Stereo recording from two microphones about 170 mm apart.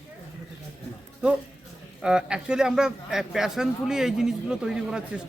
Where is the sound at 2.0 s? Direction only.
5° right (ahead or behind).